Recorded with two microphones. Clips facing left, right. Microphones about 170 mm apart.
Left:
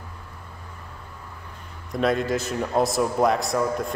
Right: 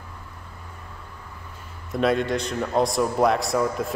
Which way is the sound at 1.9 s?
Centre (ahead or behind).